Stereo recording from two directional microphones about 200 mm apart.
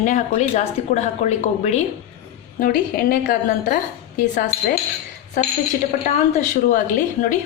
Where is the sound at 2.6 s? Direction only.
45° left (ahead or behind).